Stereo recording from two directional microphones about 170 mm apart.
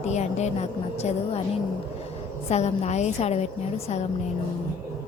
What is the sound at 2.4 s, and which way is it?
Speech, 40° left (ahead or behind).